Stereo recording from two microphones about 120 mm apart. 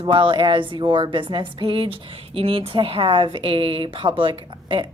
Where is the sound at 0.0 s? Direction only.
45° right (ahead or behind).